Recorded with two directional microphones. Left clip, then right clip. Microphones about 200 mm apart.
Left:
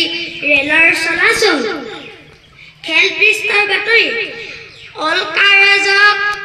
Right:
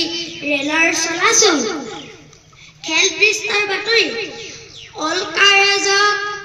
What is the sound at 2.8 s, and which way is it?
Child singing, 60° right (ahead or behind).